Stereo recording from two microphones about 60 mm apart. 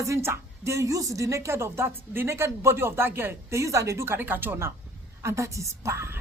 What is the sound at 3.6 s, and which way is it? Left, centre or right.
A woman's voice, right.